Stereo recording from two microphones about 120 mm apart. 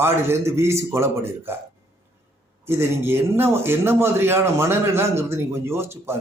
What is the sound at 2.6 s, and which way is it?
A man's voice, 20° right (ahead or behind).